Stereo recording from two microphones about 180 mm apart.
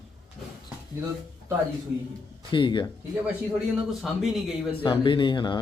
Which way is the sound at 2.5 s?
25° left (ahead or behind).